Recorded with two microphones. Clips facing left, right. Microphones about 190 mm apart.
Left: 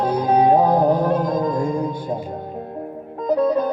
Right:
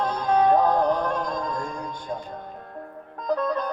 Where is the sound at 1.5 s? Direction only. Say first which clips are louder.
Left 11 dB; 20° left (ahead or behind).